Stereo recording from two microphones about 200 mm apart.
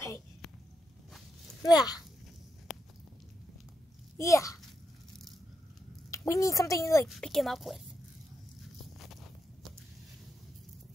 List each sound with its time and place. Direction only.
1.6 s speech: 20° left (ahead or behind)
2.7 s a sound: centre (ahead or behind)
4.2 s a child's voice: 15° left (ahead or behind)
6.0 s a woman's voice: 15° left (ahead or behind)
7.1 s speech: centre (ahead or behind)
9.0 s walk: centre (ahead or behind)